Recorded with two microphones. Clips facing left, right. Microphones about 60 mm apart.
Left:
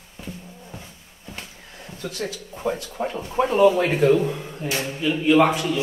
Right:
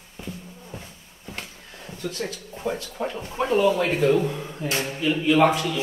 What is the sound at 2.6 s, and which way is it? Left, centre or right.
Speech, centre.